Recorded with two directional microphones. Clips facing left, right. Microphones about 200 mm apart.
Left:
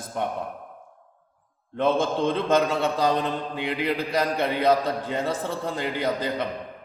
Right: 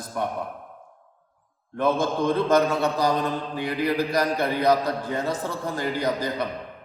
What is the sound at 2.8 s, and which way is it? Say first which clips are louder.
Mantra: even; 20° left (ahead or behind).